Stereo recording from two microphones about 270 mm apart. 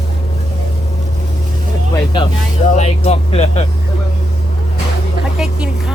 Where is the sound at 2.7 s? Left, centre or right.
Left.